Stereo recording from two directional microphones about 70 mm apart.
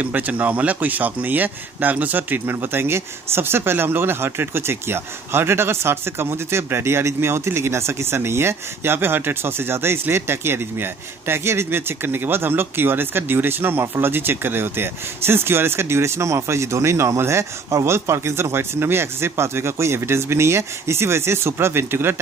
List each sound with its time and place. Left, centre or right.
0.0 s speech: right